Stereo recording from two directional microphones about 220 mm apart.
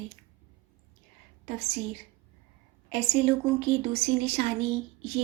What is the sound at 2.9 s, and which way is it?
Speech, 30° right (ahead or behind).